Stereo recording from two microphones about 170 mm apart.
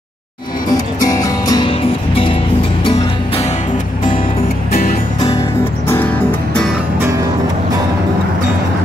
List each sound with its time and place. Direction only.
1.0 s music: 20° left (ahead or behind)
1.7 s music: 35° left (ahead or behind)